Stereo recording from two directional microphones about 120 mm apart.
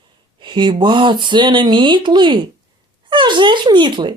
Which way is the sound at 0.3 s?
40° right (ahead or behind).